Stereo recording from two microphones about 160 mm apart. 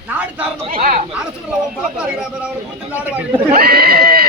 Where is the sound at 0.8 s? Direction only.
45° right (ahead or behind).